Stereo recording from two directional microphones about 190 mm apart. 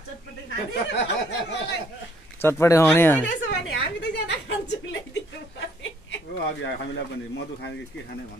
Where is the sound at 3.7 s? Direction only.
70° left (ahead or behind).